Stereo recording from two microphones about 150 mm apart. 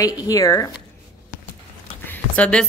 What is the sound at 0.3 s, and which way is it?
Speech, 20° left (ahead or behind).